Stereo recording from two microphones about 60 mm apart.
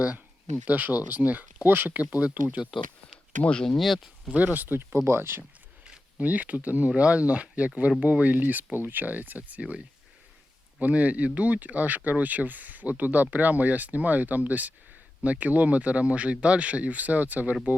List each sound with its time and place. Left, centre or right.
0.7 s speech: right
3.4 s speech: centre
3.8 s speech: centre
4.4 s speech: right
4.9 s speech: right
6.1 s speech: right